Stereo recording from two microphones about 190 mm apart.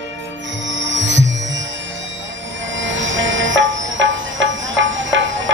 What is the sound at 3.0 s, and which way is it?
Music, 80° right.